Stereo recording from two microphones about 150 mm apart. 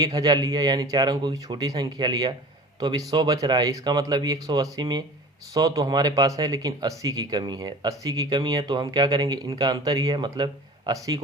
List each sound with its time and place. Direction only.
0.0 s speech: 25° right (ahead or behind)